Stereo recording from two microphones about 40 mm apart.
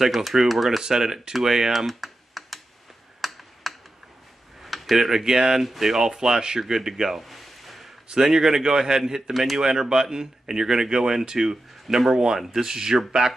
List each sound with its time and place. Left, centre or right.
0.0 s speech: centre
1.9 s computer keyboard: centre
3.2 s tick-tock: centre
4.6 s speech: centre
6.6 s a sound: centre
8.1 s speech: centre
9.3 s speech: centre
9.6 s speech: centre